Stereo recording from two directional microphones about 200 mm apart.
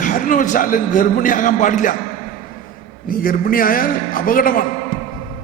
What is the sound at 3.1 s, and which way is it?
A man's voice, 45° left (ahead or behind).